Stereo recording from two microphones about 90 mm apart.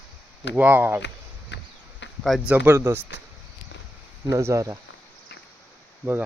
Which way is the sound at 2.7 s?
30° right (ahead or behind).